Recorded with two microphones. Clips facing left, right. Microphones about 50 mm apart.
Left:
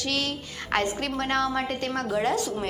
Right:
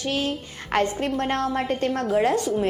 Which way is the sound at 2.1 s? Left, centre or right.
Right.